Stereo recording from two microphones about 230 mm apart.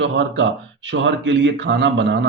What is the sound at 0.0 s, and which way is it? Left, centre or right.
Speech, right.